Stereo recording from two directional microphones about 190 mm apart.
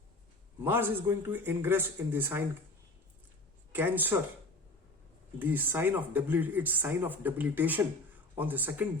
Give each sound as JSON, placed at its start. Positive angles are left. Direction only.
{"t": 0.6, "sound": "speech", "side_deg": -10}
{"t": 3.7, "sound": "speech", "side_deg": -10}
{"t": 5.4, "sound": "speech", "side_deg": -10}